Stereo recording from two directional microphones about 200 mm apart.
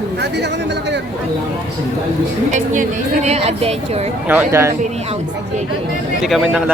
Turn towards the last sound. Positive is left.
turn(degrees=0)  # may be behind; listen again after turning